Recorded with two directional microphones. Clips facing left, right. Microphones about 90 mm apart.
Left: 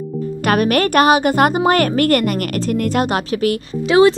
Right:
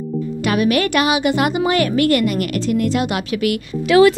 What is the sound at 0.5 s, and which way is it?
Speech, 50° left (ahead or behind).